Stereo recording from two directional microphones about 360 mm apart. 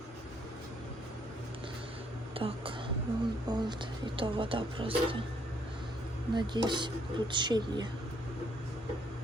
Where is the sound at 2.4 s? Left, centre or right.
Centre.